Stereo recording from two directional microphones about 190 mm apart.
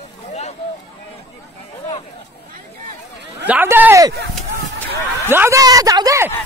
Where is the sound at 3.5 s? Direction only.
10° right (ahead or behind).